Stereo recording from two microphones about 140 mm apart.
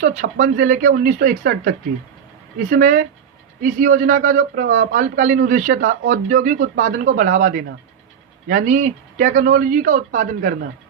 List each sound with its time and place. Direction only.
0.0 s a man's voice: 60° right (ahead or behind); by 1.7 s 90° right
2.6 s a man's voice: 75° right (ahead or behind)